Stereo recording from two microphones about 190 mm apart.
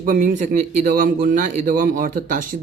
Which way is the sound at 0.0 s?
45° right (ahead or behind).